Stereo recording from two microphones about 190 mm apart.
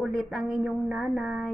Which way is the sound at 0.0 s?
Centre (ahead or behind).